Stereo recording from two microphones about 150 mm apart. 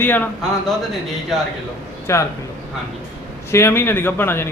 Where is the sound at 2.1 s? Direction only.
20° left (ahead or behind).